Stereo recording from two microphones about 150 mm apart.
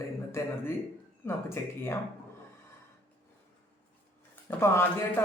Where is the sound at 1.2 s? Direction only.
15° left (ahead or behind).